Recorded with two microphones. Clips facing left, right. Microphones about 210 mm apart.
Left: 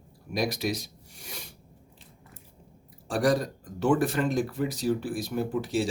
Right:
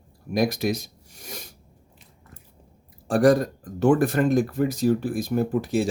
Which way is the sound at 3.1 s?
50° right (ahead or behind).